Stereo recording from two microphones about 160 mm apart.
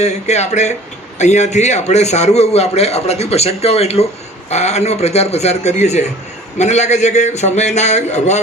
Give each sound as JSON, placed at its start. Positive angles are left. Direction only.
{"t": 0.0, "sound": "a man's voice", "side_deg": 45}